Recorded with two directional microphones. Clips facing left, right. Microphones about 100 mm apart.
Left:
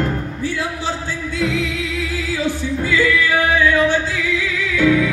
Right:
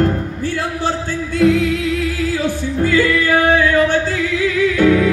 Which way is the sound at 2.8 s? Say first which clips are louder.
Right 3 dB; 50° right (ahead or behind).